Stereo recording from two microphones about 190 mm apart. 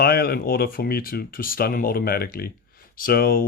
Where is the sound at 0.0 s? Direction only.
55° left (ahead or behind).